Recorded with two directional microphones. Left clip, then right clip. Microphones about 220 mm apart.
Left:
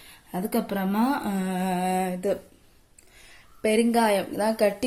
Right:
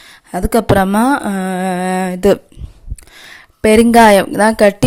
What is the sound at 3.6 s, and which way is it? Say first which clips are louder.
Speech: right 15 dB; 45° right (ahead or behind).